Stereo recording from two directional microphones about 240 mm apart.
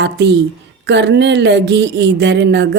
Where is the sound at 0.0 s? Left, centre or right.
Right.